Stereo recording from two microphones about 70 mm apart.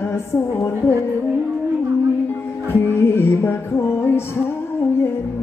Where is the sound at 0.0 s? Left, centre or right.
Left.